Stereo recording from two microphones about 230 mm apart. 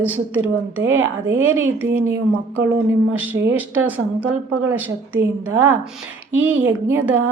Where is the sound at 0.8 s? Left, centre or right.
Right.